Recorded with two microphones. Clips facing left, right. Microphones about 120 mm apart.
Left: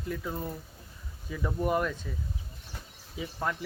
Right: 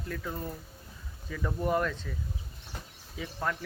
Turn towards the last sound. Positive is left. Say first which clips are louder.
# left 1 dB
turn(degrees=10)  # may be behind; listen again after turning